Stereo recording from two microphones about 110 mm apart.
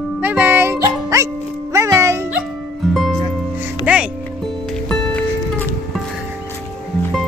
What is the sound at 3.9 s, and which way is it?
Music, 15° right (ahead or behind).